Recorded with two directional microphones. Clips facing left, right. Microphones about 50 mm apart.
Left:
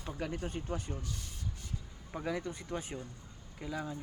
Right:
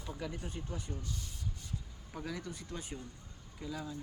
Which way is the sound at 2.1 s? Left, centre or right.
Left.